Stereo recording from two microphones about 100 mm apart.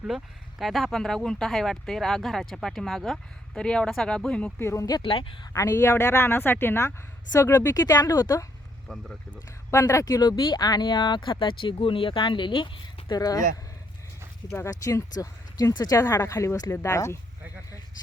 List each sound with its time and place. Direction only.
0.6 s speech: centre (ahead or behind)
4.6 s speech: 30° left (ahead or behind)
5.0 s speech: 60° left (ahead or behind)
5.5 s speech: 30° left (ahead or behind)
8.9 s speech: 5° left (ahead or behind)
9.7 s speech: 30° left (ahead or behind)
10.2 s speech: 45° left (ahead or behind)
13.1 s speech: 40° left (ahead or behind)
14.7 s speech: 35° left (ahead or behind)
16.0 s speech: 30° left (ahead or behind)